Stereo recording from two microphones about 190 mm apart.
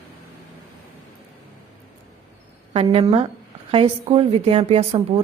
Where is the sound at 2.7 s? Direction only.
30° right (ahead or behind).